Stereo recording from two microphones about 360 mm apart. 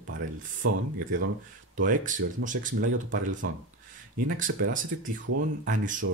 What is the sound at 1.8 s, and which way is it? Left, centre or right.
Speech, right.